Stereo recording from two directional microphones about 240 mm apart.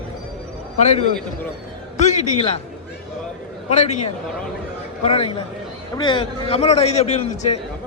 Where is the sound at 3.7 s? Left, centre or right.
Left.